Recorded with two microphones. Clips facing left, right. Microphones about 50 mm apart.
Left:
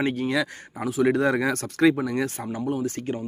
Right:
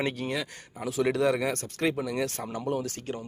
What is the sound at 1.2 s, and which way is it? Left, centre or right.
Speech, left.